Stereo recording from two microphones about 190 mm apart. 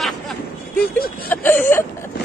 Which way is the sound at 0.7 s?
55° left (ahead or behind).